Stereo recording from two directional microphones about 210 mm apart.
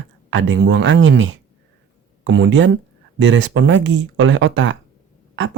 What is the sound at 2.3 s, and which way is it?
Speech, 60° right (ahead or behind).